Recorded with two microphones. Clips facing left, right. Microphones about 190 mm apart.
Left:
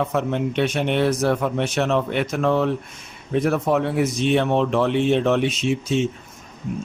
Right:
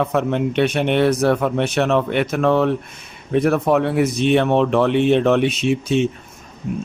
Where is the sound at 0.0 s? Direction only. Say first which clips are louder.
Right 3 dB; 65° right (ahead or behind).